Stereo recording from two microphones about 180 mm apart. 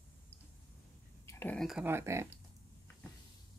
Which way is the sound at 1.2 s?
10° left (ahead or behind).